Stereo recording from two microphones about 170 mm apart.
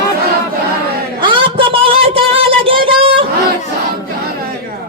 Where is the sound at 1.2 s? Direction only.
30° right (ahead or behind).